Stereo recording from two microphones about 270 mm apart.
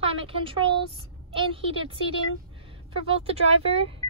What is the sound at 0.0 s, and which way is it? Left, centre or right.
A woman's voice, centre.